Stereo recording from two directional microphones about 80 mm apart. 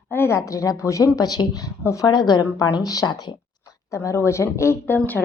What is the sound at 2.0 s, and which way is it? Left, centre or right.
A woman's voice, left.